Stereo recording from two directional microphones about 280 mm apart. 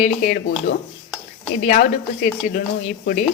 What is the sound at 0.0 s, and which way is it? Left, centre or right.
Speech, left.